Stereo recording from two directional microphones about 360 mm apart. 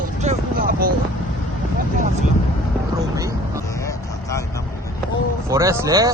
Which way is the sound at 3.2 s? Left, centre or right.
Centre.